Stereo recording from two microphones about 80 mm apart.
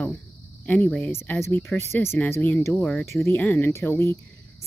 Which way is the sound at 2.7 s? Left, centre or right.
Centre.